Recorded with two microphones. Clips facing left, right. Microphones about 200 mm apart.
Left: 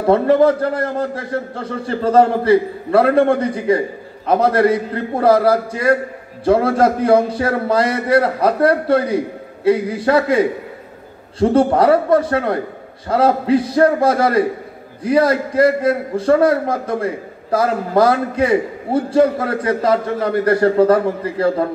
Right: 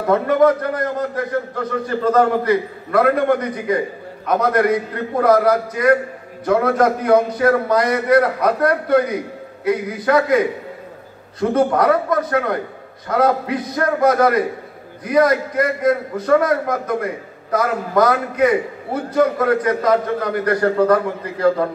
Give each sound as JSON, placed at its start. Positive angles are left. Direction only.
{"t": 0.0, "sound": "a man's voice", "side_deg": 30}